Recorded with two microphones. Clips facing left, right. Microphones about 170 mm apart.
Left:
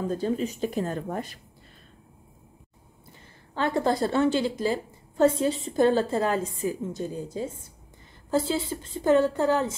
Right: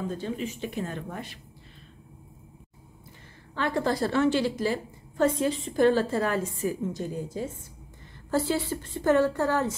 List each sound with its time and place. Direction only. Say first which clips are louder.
0.1 s a woman's voice: left 5 dB; 40° left (ahead or behind)
3.5 s a woman's voice: left 2 dB; 25° left (ahead or behind)
8.6 s a woman's voice: left 1 dB; 20° left (ahead or behind)